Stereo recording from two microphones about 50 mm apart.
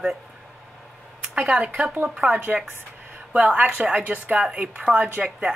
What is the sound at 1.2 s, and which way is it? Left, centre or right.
Speech, right.